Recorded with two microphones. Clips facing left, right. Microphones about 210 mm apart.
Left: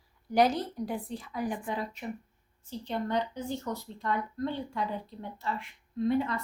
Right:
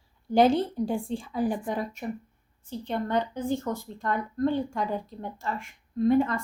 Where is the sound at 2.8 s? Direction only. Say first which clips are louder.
Right 3 dB; 55° right (ahead or behind).